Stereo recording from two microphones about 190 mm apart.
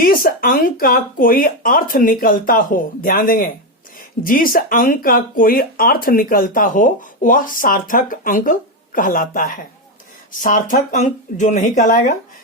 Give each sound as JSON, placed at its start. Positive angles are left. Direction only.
{"t": 0.0, "sound": "speech", "side_deg": 50}